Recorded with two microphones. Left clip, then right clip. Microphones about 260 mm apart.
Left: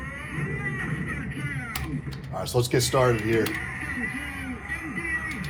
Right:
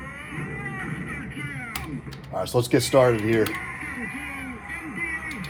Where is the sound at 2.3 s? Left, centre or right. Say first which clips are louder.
Right 3 dB; right.